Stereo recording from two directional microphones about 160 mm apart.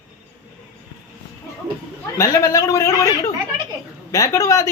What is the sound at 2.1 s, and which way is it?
Speech, 20° left (ahead or behind).